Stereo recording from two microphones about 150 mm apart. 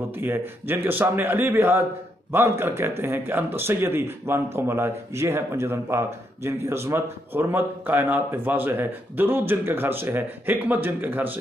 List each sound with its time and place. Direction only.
0.1 s speech: 15° right (ahead or behind)